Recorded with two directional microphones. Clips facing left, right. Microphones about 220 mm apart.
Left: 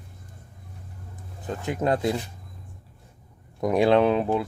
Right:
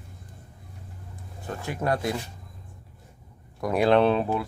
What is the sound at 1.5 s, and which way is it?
Speech, 20° left (ahead or behind).